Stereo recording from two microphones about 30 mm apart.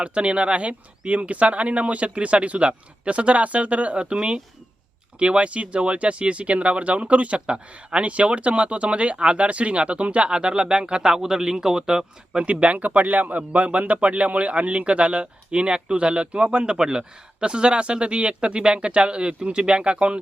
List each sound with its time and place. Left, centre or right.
0.0 s speech: right
3.9 s speech: right
7.3 s speech: right
8.0 s speech: right
10.2 s speech: right
11.1 s speech: centre
12.4 s a man's voice: right
13.5 s speech: right
16.7 s speech: right